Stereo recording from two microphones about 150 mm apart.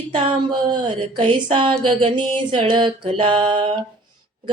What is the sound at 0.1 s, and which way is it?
Female singing, 30° right (ahead or behind).